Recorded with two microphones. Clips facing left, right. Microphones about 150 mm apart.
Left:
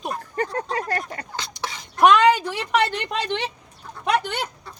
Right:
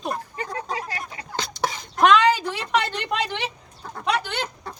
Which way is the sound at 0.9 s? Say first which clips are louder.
Left 7 dB; 50° left (ahead or behind).